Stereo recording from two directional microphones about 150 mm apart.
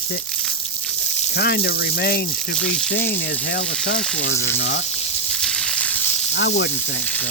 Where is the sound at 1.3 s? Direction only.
90° left.